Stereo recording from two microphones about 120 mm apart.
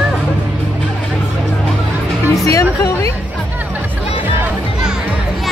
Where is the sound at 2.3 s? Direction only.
25° left (ahead or behind).